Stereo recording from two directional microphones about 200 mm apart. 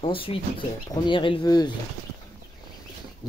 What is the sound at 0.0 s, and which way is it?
Speech, 25° left (ahead or behind).